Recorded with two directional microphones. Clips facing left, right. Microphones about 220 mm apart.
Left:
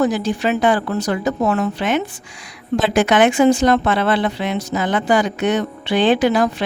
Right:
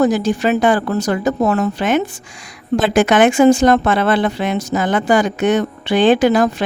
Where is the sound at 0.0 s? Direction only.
45° right (ahead or behind).